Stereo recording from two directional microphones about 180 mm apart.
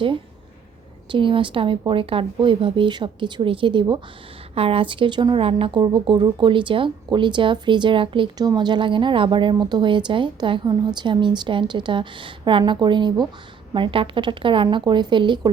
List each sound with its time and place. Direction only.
1.0 s a woman's voice: 25° right (ahead or behind)